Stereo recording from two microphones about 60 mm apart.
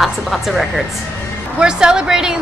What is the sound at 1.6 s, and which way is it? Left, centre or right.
Speech, centre.